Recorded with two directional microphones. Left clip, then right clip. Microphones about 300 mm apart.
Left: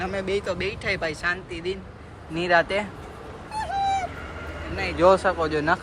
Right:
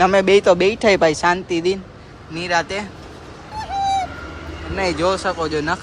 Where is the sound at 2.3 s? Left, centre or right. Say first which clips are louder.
Right 1 dB; centre.